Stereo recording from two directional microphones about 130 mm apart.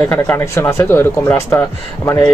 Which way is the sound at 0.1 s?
15° left (ahead or behind).